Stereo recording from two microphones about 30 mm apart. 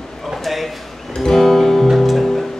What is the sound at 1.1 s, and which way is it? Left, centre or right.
Music, left.